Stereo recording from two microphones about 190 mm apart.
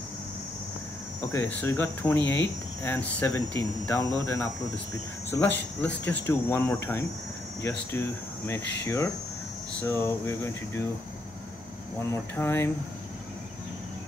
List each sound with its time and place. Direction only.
1.3 s speech: 10° left (ahead or behind)
5.3 s speech: 10° left (ahead or behind)
12.1 s speech: 10° left (ahead or behind)